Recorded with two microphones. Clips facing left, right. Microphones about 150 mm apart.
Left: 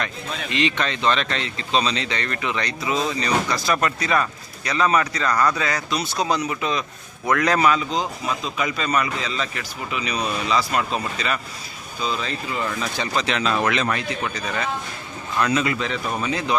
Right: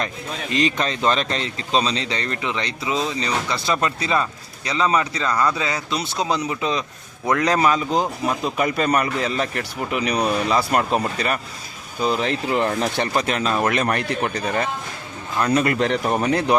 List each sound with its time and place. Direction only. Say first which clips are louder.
0.5 s speech: right 2 dB; 40° right (ahead or behind); by 5.3 s 20° right (ahead or behind)
5.3 s speech: even; 5° right (ahead or behind)
5.5 s speech: even; 20° right (ahead or behind)
8.4 s a man's voice: right 6 dB; 55° right (ahead or behind)
12.0 s a man's voice: right 5 dB; 65° right (ahead or behind)
12.8 s a man's voice: right 3 dB; 55° right (ahead or behind)
15.5 s a man's voice: right 4 dB; 55° right (ahead or behind)